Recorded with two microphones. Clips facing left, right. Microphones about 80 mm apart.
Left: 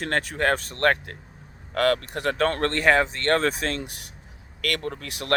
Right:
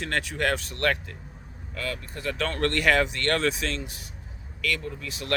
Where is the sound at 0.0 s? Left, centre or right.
Left.